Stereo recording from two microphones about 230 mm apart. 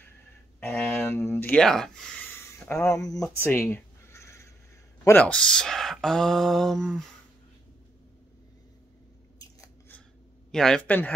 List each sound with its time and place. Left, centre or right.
0.6 s a sound: centre
5.0 s speech: centre
9.6 s scissors: centre
10.5 s speech: centre